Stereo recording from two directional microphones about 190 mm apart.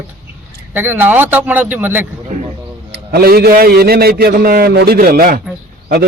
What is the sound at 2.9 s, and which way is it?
A man's voice, 55° right (ahead or behind).